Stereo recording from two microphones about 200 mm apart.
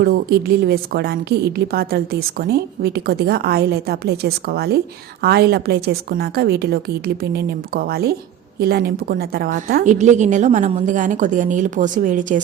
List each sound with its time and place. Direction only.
0.0 s a woman's voice: 50° right (ahead or behind)